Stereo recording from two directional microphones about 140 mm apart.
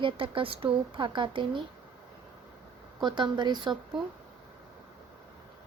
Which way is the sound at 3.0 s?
35° right (ahead or behind).